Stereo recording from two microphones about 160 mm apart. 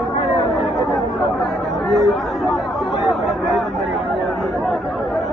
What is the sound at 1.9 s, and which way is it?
Speech, centre (ahead or behind).